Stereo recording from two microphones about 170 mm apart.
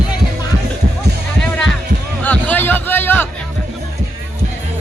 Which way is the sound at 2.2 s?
10° left (ahead or behind).